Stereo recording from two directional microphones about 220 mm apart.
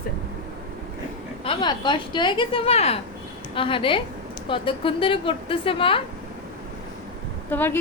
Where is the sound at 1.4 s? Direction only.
20° left (ahead or behind).